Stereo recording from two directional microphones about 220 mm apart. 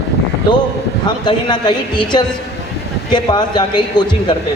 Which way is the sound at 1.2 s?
20° left (ahead or behind).